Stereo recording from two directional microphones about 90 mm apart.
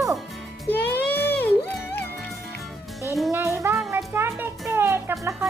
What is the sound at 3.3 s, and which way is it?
Music, 35° right (ahead or behind).